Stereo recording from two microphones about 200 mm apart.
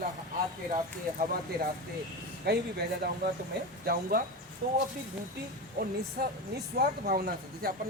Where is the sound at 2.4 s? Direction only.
55° right (ahead or behind).